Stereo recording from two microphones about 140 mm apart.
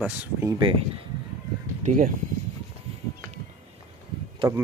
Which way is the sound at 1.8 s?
80° right.